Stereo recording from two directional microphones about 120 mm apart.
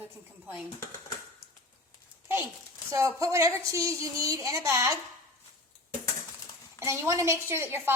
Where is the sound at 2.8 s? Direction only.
25° right (ahead or behind).